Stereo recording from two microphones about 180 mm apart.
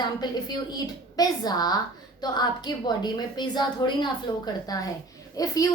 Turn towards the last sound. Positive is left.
turn(degrees=20)  # may be behind; listen again after turning